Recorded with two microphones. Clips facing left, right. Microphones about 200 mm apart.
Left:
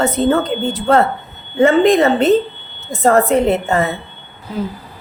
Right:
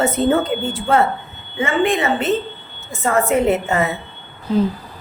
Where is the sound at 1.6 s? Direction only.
40° left (ahead or behind).